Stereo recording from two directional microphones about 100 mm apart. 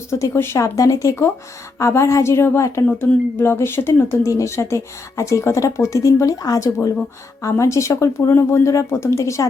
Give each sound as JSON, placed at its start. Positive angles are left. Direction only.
{"t": 0.1, "sound": "speech", "side_deg": 25}